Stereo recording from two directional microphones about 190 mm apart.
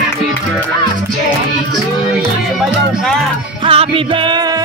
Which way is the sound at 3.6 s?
30° right (ahead or behind).